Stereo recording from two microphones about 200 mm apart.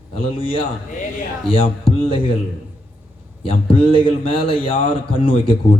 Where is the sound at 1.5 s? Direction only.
25° left (ahead or behind).